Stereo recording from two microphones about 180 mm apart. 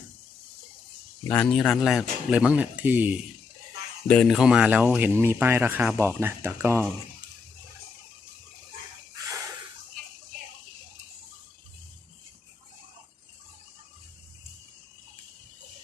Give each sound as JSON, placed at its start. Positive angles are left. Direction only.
{"t": 1.3, "sound": "speech", "side_deg": 5}
{"t": 4.0, "sound": "speech", "side_deg": 5}